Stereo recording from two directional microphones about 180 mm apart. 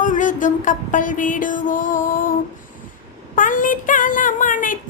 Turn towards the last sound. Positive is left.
turn(degrees=45)  # may be behind; listen again after turning